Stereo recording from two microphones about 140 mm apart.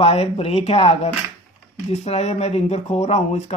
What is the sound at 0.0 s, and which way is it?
Speech, 45° left (ahead or behind).